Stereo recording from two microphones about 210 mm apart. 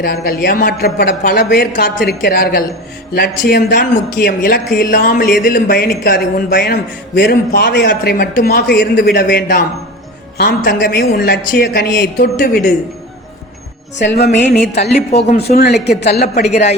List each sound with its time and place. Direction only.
0.0 s speech: 45° left (ahead or behind)
14.0 s speech: 55° left (ahead or behind)
15.1 s speech: 30° left (ahead or behind)
15.4 s speech: 50° left (ahead or behind)